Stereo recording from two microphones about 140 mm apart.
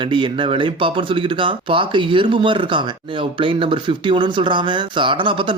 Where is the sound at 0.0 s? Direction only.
35° right (ahead or behind).